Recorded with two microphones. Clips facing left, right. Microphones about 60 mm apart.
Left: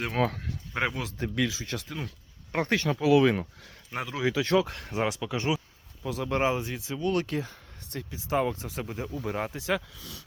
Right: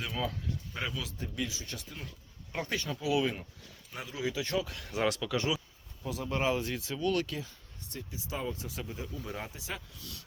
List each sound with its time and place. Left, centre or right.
0.0 s speech: left
2.5 s speech: left
3.0 s speech: left
3.9 s speech: left
4.6 s speech: left
4.9 s speech: centre
6.0 s speech: left
6.4 s speech: centre
7.0 s speech: left
7.3 s speech: left
8.5 s speech: left